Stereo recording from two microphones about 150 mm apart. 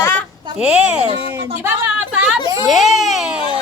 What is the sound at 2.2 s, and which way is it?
Speech, centre (ahead or behind).